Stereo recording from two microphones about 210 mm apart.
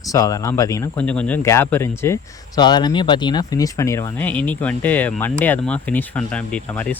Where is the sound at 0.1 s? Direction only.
15° left (ahead or behind).